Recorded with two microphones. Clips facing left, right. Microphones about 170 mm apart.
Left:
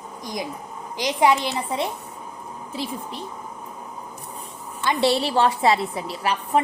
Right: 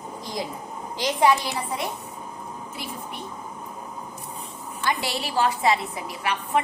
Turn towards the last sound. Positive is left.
turn(degrees=35)  # may be behind; listen again after turning